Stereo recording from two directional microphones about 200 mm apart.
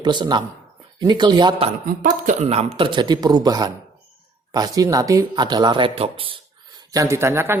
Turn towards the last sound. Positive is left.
turn(degrees=-10)  # may be behind; listen again after turning